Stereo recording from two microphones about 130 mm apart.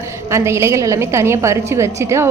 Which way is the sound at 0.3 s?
20° right (ahead or behind).